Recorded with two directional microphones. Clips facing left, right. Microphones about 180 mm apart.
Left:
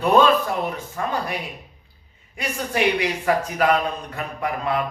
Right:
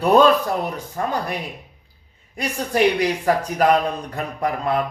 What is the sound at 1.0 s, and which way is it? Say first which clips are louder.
Speech: right 3 dB; 35° right (ahead or behind).